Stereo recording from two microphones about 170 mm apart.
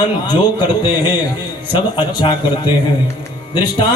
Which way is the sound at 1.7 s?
25° left (ahead or behind).